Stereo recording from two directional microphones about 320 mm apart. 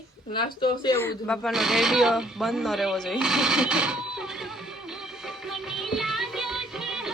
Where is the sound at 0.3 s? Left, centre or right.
Centre.